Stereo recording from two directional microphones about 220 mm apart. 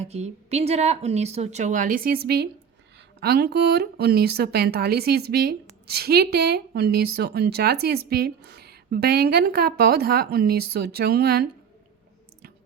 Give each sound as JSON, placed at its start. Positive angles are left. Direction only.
{"t": 0.0, "sound": "a woman's voice", "side_deg": -30}